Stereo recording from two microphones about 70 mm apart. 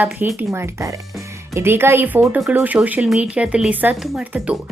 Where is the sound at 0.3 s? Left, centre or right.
Right.